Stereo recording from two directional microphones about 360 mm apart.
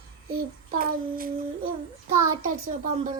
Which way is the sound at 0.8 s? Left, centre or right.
Right.